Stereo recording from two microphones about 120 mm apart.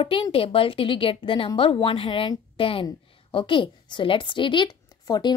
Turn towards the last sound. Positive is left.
turn(degrees=35)  # may be behind; listen again after turning